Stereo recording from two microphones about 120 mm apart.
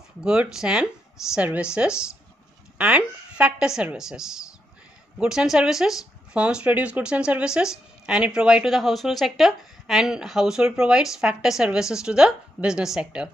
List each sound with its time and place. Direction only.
0.2 s speech: 5° right (ahead or behind)